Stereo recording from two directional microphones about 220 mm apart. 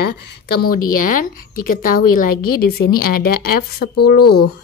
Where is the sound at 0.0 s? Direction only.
45° left (ahead or behind).